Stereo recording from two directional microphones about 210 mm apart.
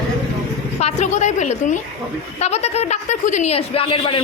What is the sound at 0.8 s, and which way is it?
Speech, 35° left (ahead or behind).